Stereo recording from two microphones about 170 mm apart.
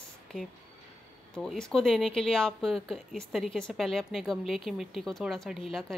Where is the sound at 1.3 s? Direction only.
5° left (ahead or behind).